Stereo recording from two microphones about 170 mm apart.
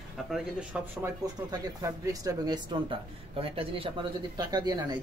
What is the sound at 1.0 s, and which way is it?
Speech, 20° right (ahead or behind).